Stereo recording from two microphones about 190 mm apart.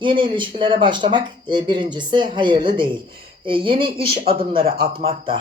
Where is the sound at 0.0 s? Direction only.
25° right (ahead or behind).